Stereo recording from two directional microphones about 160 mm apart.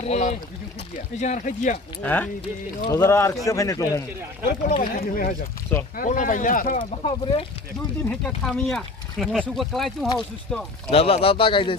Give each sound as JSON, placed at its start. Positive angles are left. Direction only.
{"t": 0.1, "sound": "speech", "side_deg": 50}
{"t": 2.0, "sound": "speech", "side_deg": 10}
{"t": 2.8, "sound": "speech", "side_deg": 20}
{"t": 4.7, "sound": "speech", "side_deg": 60}
{"t": 7.0, "sound": "speech", "side_deg": 35}
{"t": 8.2, "sound": "speech", "side_deg": 5}
{"t": 10.9, "sound": "speech", "side_deg": 35}